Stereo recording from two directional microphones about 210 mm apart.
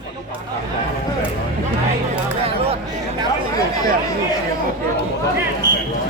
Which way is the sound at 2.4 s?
30° right (ahead or behind).